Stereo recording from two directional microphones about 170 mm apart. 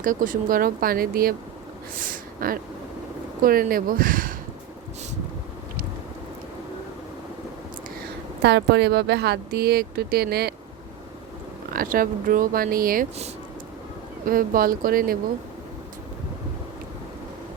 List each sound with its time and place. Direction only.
0.0 s speech: 50° right (ahead or behind)
8.4 s speech: 90° right; by 10.5 s 70° right (ahead or behind)
11.7 s speech: 55° right (ahead or behind)
14.3 s speech: 55° right (ahead or behind)